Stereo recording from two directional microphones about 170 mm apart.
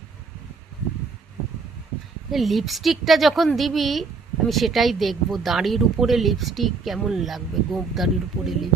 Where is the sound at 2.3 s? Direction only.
Centre (ahead or behind).